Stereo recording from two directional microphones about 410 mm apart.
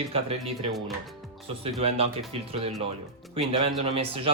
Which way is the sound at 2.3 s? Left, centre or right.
Centre.